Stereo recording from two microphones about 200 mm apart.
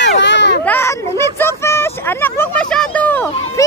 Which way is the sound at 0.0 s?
60° left (ahead or behind).